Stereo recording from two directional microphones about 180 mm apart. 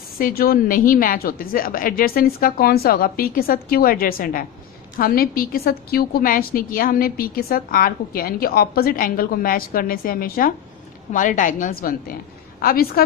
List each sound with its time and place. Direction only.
0.2 s a woman's voice: 55° left (ahead or behind)